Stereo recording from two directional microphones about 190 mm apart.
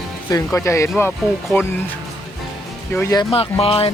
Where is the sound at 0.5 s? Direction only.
15° left (ahead or behind).